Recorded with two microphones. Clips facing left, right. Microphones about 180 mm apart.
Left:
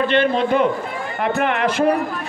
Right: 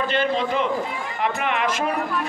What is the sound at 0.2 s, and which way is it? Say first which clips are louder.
A man's voice: left 5 dB; 55° left (ahead or behind).